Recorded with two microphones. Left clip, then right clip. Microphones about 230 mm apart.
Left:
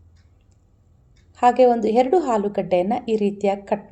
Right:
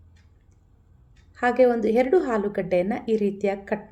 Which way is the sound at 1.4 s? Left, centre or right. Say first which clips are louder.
Left 4 dB; centre.